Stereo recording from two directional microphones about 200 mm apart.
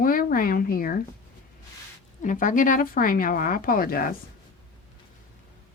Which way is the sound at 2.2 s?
40° left (ahead or behind).